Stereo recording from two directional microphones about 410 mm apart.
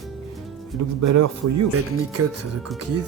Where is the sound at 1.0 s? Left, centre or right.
Right.